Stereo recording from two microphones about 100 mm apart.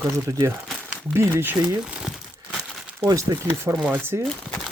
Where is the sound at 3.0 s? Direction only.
35° right (ahead or behind).